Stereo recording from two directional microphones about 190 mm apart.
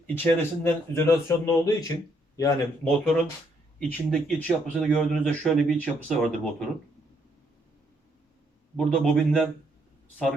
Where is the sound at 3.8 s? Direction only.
5° left (ahead or behind).